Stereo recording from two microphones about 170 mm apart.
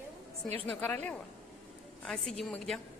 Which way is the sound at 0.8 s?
10° left (ahead or behind).